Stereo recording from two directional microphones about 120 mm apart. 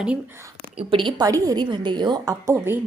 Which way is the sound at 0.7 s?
45° right (ahead or behind).